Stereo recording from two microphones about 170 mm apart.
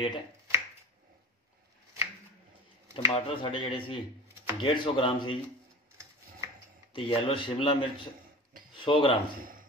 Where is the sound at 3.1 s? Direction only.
30° left (ahead or behind).